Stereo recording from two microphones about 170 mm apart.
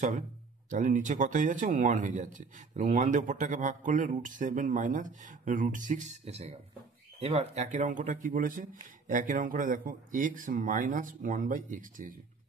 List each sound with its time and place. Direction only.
0.7 s speech: 50° right (ahead or behind)